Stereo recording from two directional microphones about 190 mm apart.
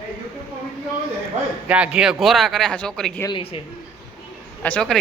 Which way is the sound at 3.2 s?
25° left (ahead or behind).